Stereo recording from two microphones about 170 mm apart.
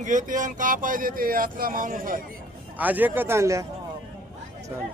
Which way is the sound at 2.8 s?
10° right (ahead or behind).